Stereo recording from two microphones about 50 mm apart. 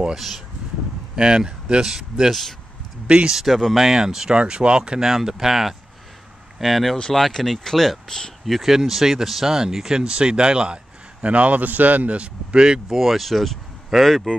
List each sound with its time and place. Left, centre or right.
1.1 s speech: centre
12.9 s speech: centre